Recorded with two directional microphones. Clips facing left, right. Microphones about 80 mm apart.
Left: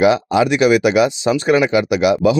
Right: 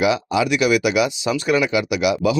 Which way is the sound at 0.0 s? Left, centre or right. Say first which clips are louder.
Left 5 dB; left.